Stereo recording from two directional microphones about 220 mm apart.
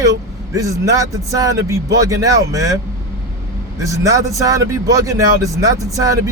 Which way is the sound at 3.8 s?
15° right (ahead or behind).